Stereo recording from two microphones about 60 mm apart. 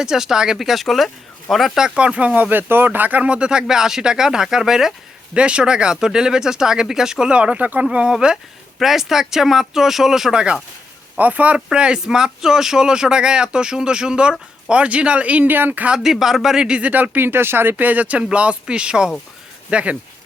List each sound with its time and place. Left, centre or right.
0.0 s speech: centre
1.8 s speech: centre
3.2 s speech: centre
5.3 s speech: centre
7.9 s speech: centre
11.2 s speech: right
16.0 s speech: centre
16.9 s speech: right